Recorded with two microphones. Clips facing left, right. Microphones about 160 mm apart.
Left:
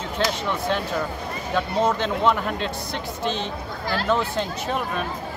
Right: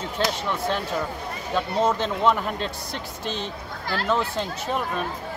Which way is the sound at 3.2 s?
40° right (ahead or behind).